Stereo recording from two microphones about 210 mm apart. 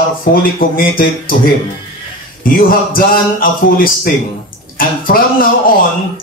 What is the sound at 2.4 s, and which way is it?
A man's voice, 45° left (ahead or behind).